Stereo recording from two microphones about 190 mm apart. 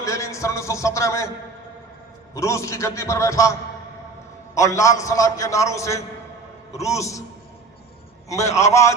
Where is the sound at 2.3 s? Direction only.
15° left (ahead or behind).